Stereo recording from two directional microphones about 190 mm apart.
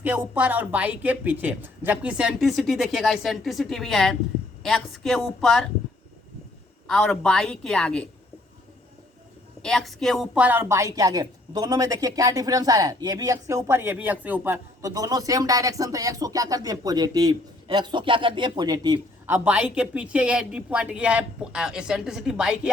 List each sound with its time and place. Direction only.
0.0 s speech: 10° right (ahead or behind)
6.8 s speech: 5° left (ahead or behind)
9.6 s a woman's voice: centre (ahead or behind)